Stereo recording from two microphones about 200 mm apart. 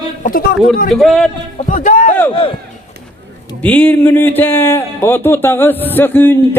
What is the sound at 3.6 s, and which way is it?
A man's voice, 10° left (ahead or behind).